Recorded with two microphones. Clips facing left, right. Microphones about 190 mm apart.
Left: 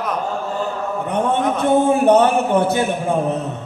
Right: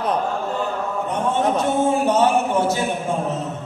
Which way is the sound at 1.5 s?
60° left (ahead or behind).